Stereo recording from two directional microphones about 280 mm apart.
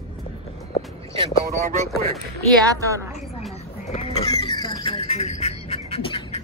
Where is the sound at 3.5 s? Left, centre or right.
Left.